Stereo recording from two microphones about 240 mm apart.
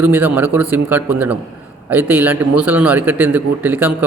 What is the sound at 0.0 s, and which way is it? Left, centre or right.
A man's voice, centre.